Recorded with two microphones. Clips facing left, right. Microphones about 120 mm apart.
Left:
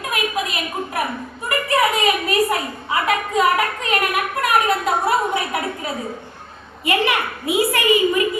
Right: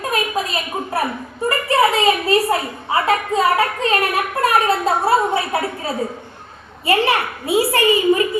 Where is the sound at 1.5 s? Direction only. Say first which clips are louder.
Right 2 dB; 30° right (ahead or behind).